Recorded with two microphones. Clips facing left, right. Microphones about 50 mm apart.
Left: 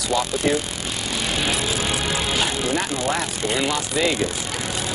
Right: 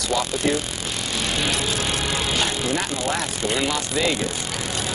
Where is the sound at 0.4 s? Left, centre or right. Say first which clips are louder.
Left 1 dB; centre.